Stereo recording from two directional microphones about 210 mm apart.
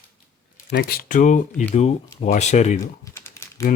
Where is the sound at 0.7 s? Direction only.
45° left (ahead or behind).